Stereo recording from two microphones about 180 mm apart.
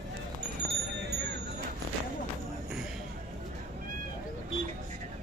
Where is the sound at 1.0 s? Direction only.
70° right (ahead or behind).